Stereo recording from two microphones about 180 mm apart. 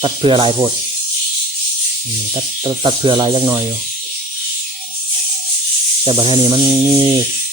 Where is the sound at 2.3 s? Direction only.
25° right (ahead or behind).